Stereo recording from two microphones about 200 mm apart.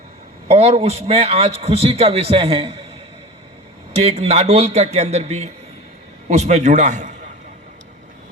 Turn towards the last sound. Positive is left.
turn(degrees=-35)  # may be behind; listen again after turning